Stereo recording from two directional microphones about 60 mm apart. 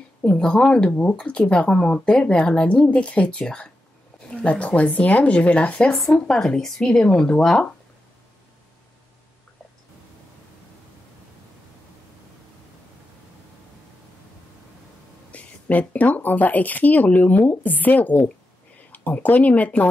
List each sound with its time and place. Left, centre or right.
0.4 s speech: centre
6.1 s speech: centre
15.3 s speech: left